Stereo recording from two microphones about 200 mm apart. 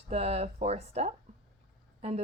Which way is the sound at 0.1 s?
30° right (ahead or behind).